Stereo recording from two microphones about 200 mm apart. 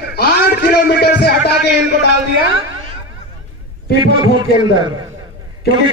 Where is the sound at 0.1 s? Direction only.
55° left (ahead or behind).